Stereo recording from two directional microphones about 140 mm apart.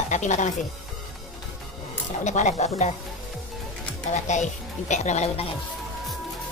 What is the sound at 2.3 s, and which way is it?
Speech, 60° left (ahead or behind).